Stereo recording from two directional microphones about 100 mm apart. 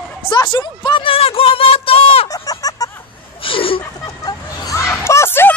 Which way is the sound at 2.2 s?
35° left (ahead or behind).